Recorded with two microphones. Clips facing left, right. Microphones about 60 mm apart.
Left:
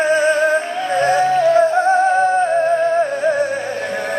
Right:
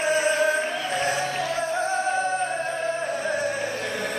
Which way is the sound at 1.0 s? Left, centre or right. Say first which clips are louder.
Left 14 dB; left.